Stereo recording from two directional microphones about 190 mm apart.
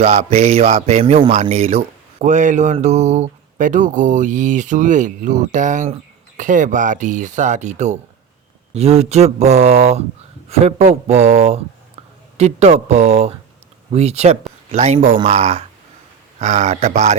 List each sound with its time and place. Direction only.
0.0 s speech: 35° right (ahead or behind)